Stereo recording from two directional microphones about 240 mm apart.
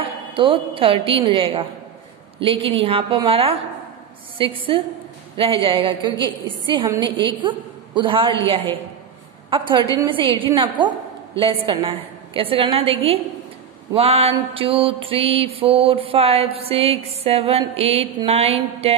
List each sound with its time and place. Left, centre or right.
0.0 s a woman's voice: right
2.3 s mantra: right
7.2 s a woman's voice: centre
9.5 s mantra: centre